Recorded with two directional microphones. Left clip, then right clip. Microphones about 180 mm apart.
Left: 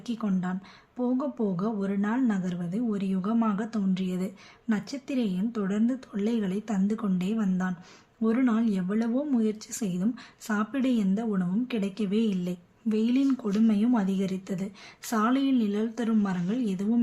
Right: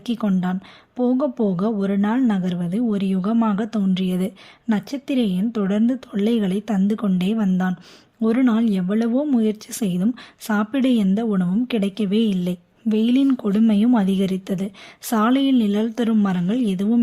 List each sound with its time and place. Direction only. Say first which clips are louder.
0.0 s speech: right 8 dB; 40° right (ahead or behind)